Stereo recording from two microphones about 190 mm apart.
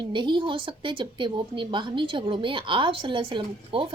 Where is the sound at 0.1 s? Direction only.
25° right (ahead or behind).